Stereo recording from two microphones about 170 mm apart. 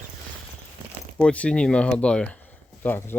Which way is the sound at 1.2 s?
5° left (ahead or behind).